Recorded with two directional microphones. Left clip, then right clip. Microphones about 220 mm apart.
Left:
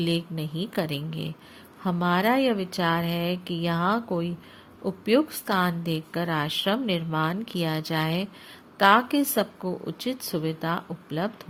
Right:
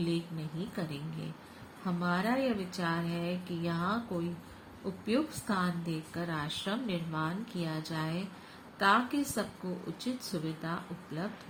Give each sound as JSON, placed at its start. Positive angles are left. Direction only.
{"t": 0.0, "sound": "a woman's voice", "side_deg": 45}